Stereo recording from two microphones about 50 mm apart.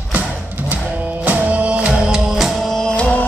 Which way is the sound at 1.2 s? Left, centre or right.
Right.